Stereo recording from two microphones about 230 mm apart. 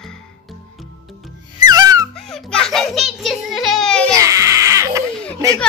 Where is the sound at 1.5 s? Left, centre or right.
Centre.